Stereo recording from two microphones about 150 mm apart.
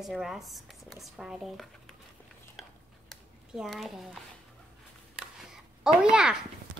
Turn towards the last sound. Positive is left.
turn(degrees=-5)  # may be behind; listen again after turning